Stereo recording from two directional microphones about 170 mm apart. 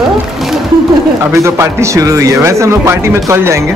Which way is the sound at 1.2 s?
15° right (ahead or behind).